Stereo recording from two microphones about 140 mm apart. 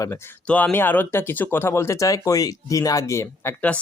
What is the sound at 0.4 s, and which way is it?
Speech, 10° left (ahead or behind).